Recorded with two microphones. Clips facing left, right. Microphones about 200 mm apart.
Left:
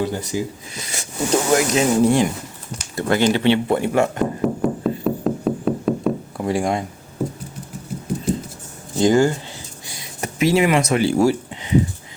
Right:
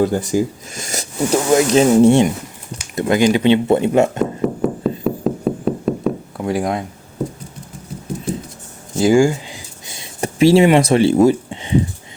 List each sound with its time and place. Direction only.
0.0 s speech: 50° right (ahead or behind)
1.5 s speech: 30° right (ahead or behind)
4.2 s knock: centre (ahead or behind)
9.0 s speech: 10° right (ahead or behind)
9.8 s a sound: 25° right (ahead or behind)